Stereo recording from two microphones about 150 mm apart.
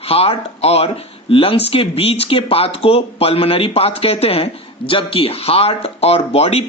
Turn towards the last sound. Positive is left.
turn(degrees=40)  # may be behind; listen again after turning